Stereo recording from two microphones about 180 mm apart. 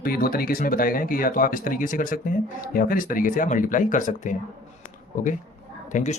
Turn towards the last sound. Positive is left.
turn(degrees=40)  # may be behind; listen again after turning